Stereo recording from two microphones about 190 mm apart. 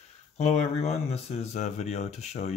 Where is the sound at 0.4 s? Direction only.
35° left (ahead or behind).